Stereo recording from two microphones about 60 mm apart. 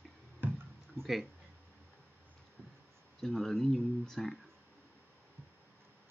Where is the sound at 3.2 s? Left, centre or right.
Centre.